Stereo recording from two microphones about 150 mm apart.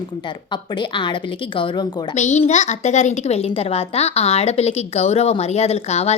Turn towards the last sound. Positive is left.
turn(degrees=45)  # may be behind; listen again after turning